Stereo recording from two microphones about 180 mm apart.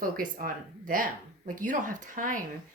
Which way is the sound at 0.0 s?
50° right (ahead or behind).